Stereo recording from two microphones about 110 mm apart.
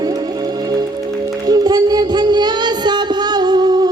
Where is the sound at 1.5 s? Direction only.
40° right (ahead or behind).